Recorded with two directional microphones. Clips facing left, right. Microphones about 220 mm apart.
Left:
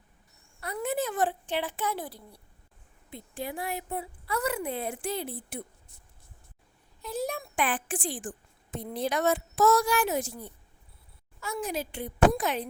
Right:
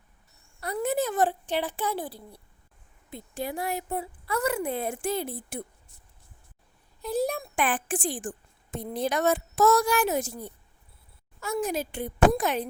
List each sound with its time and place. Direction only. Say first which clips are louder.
0.6 s a sound: right 3 dB; 40° right (ahead or behind)
3.1 s a woman's voice: right 3 dB; 40° right (ahead or behind)
7.0 s a woman's voice: right 5 dB; 35° right (ahead or behind)